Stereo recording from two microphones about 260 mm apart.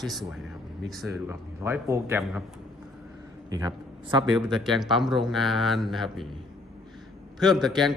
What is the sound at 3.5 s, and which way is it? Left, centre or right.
Speech, centre.